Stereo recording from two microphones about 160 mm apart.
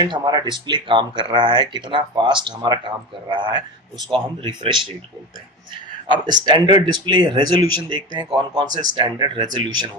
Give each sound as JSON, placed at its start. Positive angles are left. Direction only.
{"t": 0.0, "sound": "speech", "side_deg": -25}
{"t": 6.1, "sound": "speech", "side_deg": -30}